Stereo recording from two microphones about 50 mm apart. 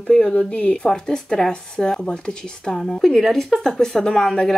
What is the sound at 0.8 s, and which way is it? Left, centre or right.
A woman's voice, centre.